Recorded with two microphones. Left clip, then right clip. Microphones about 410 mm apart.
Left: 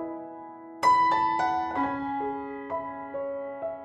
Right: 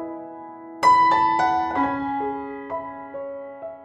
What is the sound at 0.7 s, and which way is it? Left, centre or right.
Music, right.